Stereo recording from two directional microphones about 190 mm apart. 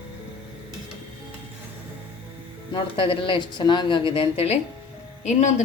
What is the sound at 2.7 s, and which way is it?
A woman's voice, 25° left (ahead or behind).